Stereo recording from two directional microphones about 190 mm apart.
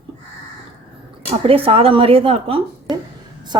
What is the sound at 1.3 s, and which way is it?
A woman's voice, 30° right (ahead or behind).